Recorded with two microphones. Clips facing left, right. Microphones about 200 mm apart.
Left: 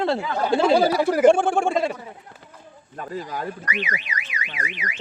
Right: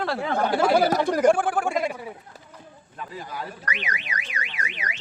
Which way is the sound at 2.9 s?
45° left (ahead or behind).